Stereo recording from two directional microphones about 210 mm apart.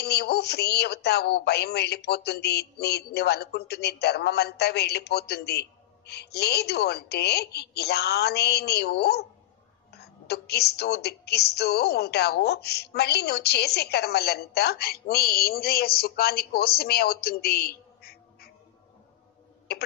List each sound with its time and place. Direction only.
0.0 s a woman's voice: 50° left (ahead or behind)